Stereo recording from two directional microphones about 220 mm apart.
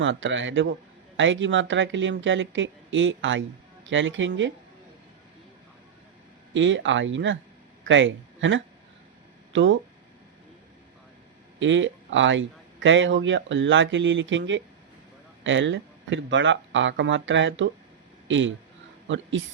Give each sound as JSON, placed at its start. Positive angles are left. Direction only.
{"t": 0.0, "sound": "a man's voice", "side_deg": -55}
{"t": 6.5, "sound": "a man's voice", "side_deg": -60}
{"t": 11.6, "sound": "a man's voice", "side_deg": -60}